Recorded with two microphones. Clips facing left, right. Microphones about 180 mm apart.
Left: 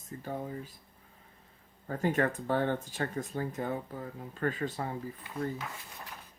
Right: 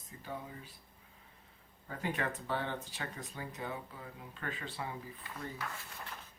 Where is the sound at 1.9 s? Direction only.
45° left (ahead or behind).